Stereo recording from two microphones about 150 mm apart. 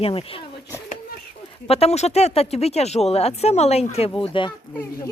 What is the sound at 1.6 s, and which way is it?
Speech, 40° left (ahead or behind).